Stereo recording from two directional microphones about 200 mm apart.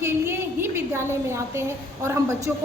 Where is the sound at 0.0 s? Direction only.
10° right (ahead or behind).